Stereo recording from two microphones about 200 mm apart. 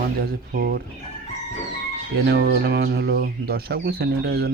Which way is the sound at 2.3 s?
55° right (ahead or behind).